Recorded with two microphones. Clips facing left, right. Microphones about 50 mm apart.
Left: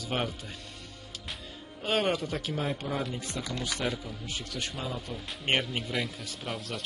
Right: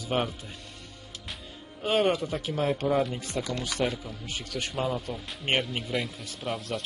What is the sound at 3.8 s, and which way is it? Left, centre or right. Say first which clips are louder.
A man's voice: right 3 dB; centre.